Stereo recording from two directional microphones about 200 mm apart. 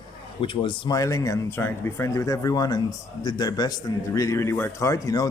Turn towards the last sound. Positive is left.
turn(degrees=15)  # may be behind; listen again after turning